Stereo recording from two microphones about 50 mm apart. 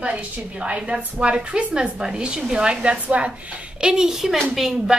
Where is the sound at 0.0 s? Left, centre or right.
Right.